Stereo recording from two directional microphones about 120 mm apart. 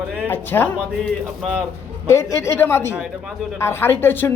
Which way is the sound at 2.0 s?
25° left (ahead or behind).